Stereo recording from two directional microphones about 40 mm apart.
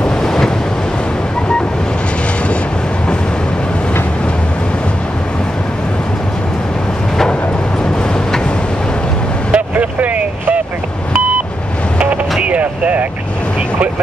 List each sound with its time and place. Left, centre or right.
0.0 s waves: centre
9.5 s vehicle: right
12.0 s vehicle: right